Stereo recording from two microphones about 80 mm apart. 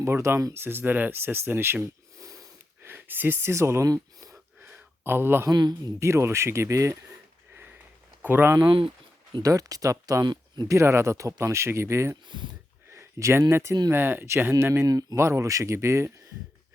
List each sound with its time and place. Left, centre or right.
0.0 s speech: right
2.1 s sniff: right
2.8 s speech: right
4.6 s a sound: right
5.5 s a man's voice: right
6.0 s speech: right
8.2 s speech: right
9.4 s speech: right
12.3 s speech: right
12.9 s a sound: right
13.5 s speech: right